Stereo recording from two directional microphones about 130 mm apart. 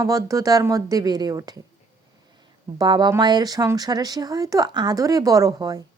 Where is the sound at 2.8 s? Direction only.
35° right (ahead or behind).